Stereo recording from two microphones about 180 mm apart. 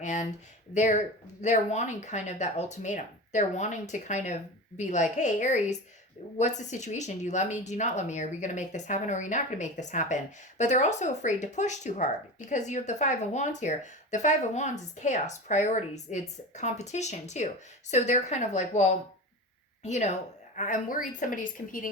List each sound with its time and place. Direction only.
0.0 s a woman's voice: 40° left (ahead or behind)